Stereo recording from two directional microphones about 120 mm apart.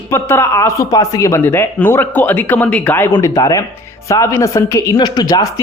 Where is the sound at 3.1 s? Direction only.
25° left (ahead or behind).